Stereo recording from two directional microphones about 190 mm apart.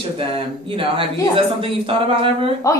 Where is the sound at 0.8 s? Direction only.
30° right (ahead or behind).